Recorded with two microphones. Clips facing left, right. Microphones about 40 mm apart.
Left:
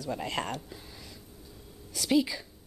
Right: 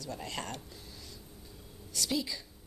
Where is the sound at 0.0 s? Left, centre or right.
Centre.